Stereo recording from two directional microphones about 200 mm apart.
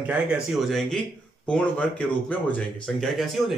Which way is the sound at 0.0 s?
5° right (ahead or behind).